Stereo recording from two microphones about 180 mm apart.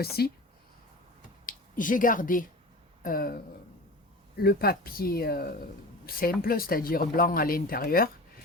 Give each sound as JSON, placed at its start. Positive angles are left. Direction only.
{"t": 0.0, "sound": "speech", "side_deg": 60}
{"t": 1.5, "sound": "speech", "side_deg": 50}